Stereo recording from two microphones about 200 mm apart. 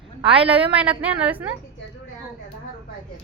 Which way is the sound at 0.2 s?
30° right (ahead or behind).